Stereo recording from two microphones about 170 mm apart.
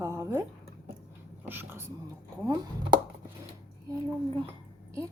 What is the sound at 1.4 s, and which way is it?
Speech, 10° right (ahead or behind).